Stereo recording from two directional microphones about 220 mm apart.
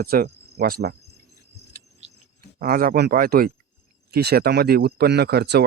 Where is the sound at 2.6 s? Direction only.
40° right (ahead or behind).